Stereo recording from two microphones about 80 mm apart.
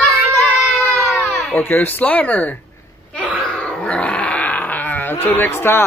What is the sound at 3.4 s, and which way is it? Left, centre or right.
Dog, centre.